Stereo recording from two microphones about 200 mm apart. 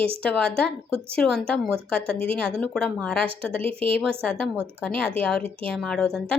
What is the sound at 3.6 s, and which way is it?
Speech, 30° right (ahead or behind).